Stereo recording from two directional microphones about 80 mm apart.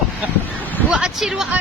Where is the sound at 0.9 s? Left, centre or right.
Centre.